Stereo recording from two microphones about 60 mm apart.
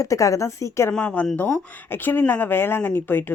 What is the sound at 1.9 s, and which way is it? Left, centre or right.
A woman's voice, left.